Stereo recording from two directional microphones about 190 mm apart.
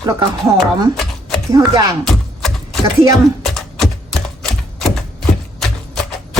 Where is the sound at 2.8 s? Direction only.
15° right (ahead or behind).